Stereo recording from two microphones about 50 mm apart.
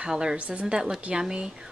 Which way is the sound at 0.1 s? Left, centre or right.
Centre.